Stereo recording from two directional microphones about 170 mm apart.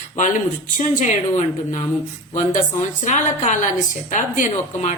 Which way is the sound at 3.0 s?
45° left (ahead or behind).